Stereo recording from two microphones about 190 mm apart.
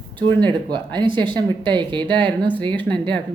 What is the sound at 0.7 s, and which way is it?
Speech, 25° right (ahead or behind).